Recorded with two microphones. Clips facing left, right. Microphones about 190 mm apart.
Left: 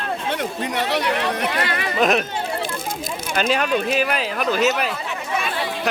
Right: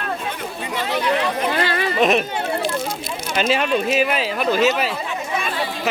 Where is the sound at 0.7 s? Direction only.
70° left (ahead or behind).